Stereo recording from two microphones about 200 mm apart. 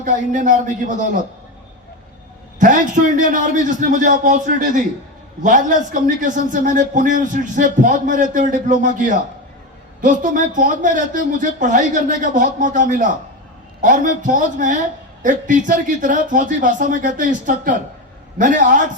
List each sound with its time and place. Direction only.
0.0 s speech: 40° right (ahead or behind)
2.6 s speech: 40° right (ahead or behind)
10.0 s speech: 40° right (ahead or behind)